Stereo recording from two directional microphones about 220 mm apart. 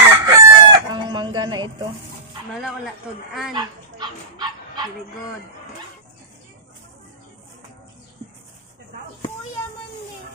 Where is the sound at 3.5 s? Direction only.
20° right (ahead or behind).